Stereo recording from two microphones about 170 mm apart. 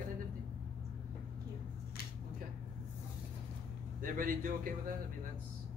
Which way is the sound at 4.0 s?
55° right (ahead or behind).